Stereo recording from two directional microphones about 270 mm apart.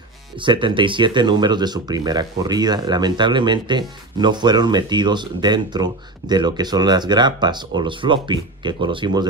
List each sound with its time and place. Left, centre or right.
0.4 s speech: centre